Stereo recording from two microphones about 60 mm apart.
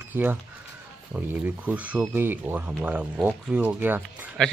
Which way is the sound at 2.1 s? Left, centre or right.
Right.